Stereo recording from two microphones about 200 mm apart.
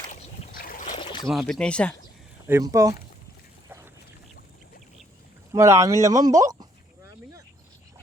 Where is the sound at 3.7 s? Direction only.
10° right (ahead or behind).